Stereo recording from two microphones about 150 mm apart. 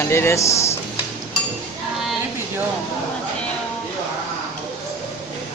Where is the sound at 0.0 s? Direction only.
15° left (ahead or behind).